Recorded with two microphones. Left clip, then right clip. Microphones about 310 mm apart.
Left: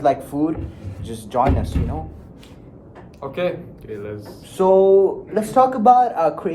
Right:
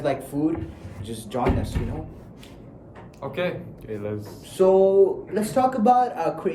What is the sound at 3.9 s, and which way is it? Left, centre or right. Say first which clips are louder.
Speech: left 1 dB; centre.